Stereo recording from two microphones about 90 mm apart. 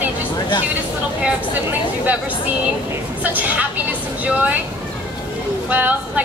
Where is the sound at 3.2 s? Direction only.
15° right (ahead or behind).